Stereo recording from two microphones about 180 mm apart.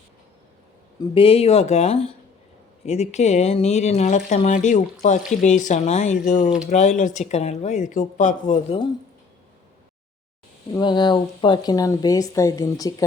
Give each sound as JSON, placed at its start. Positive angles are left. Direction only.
{"t": 1.1, "sound": "speech", "side_deg": 30}
{"t": 10.8, "sound": "speech", "side_deg": 25}